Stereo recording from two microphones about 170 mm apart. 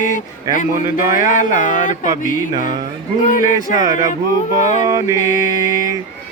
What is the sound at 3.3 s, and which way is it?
Speech, 50° left (ahead or behind).